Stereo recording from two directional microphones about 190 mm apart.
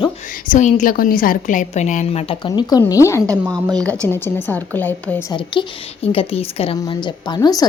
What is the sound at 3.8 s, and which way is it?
A woman's voice, 10° left (ahead or behind).